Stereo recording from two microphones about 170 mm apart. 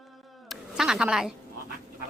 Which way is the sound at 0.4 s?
Centre (ahead or behind).